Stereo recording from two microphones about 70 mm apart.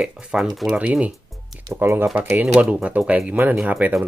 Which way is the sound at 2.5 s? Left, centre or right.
Centre.